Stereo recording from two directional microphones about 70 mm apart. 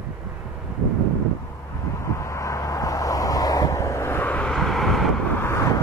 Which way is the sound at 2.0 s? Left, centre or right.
Left.